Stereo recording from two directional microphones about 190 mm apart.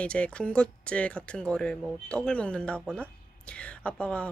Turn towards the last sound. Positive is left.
turn(degrees=5)  # may be behind; listen again after turning